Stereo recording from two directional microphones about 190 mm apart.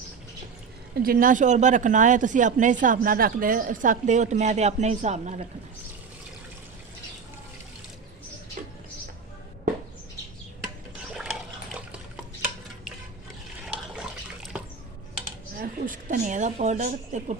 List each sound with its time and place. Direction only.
1.0 s speech: 45° right (ahead or behind)
8.6 s music: 45° right (ahead or behind)
11.2 s water: 5° right (ahead or behind)
13.7 s water: 5° right (ahead or behind)
15.5 s a sound: 45° right (ahead or behind)